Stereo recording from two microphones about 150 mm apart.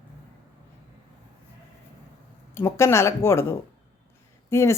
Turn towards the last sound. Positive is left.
turn(degrees=20)  # may be behind; listen again after turning